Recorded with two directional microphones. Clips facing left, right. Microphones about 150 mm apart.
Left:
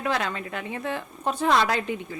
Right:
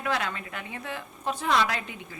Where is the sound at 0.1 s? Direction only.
35° left (ahead or behind).